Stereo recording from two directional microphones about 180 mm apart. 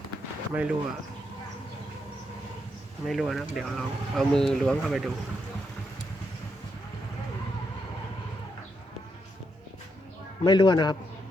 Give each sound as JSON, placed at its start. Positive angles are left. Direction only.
{"t": 0.5, "sound": "speech", "side_deg": -5}
{"t": 3.1, "sound": "speech", "side_deg": 0}
{"t": 10.4, "sound": "speech", "side_deg": 25}